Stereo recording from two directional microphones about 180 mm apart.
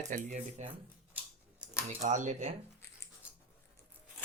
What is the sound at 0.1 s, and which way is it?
Speech, 45° right (ahead or behind).